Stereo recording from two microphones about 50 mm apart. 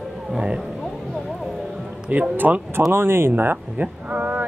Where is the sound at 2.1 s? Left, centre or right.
Right.